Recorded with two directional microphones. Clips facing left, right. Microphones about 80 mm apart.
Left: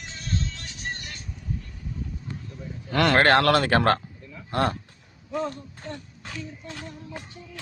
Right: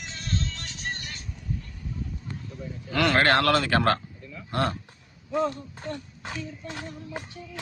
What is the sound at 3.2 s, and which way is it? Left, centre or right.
Speech, left.